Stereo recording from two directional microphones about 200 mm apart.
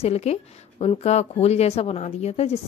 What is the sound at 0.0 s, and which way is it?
A woman's voice, 30° left (ahead or behind).